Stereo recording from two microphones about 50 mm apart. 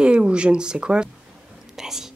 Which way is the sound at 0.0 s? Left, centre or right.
Centre.